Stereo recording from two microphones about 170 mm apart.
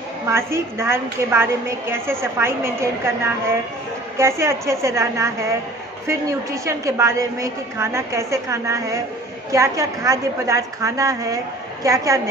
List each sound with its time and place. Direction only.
0.3 s a woman's voice: 15° right (ahead or behind)